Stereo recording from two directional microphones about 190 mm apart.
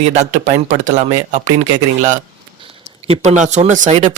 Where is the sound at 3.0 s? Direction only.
30° right (ahead or behind).